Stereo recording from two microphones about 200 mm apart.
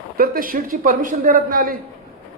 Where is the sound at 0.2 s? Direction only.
45° right (ahead or behind).